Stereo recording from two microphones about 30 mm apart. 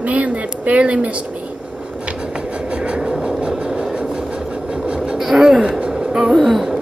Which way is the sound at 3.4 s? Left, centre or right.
Right.